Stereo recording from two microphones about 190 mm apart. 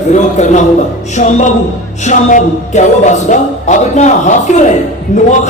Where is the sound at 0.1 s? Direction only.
40° left (ahead or behind).